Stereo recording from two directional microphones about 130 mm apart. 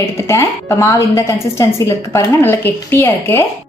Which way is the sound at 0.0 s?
20° left (ahead or behind).